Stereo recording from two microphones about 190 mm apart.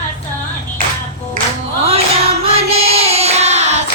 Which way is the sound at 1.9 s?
30° right (ahead or behind).